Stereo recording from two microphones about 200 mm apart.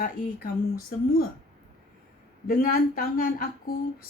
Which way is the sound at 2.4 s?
45° left (ahead or behind).